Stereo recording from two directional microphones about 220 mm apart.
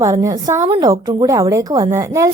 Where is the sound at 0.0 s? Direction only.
15° right (ahead or behind).